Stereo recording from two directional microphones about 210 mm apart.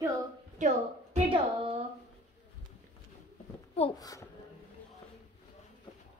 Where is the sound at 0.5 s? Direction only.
30° right (ahead or behind).